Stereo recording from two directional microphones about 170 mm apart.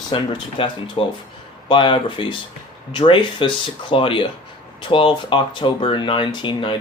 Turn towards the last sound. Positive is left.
turn(degrees=30)  # may be behind; listen again after turning